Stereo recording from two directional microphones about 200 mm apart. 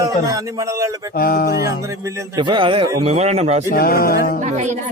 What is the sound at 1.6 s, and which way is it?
A man's voice, 15° right (ahead or behind).